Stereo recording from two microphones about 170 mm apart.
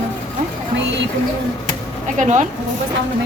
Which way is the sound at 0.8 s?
90° right.